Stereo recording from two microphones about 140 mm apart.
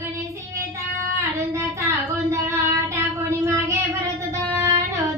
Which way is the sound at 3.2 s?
20° right (ahead or behind).